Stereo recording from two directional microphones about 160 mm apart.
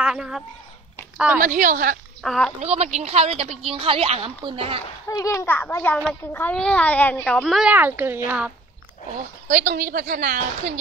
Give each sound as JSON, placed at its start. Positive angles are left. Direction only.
{"t": 0.0, "sound": "speech", "side_deg": -5}
{"t": 1.4, "sound": "a woman's voice", "side_deg": -55}
{"t": 2.2, "sound": "speech", "side_deg": 5}
{"t": 2.6, "sound": "a woman's voice", "side_deg": -40}
{"t": 5.0, "sound": "a woman's voice", "side_deg": 20}
{"t": 7.7, "sound": "speech", "side_deg": -10}
{"t": 9.5, "sound": "a woman's voice", "side_deg": -60}